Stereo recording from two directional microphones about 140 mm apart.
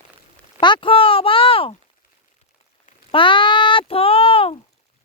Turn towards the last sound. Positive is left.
turn(degrees=45)  # may be behind; listen again after turning